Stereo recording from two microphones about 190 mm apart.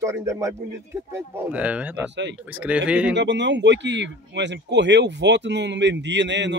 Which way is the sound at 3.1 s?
65° right (ahead or behind).